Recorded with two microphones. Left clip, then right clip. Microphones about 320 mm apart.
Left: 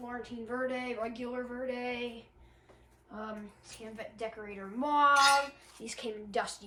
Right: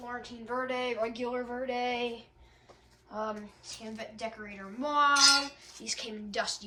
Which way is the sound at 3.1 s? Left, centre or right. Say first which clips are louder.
Right 6 dB; centre.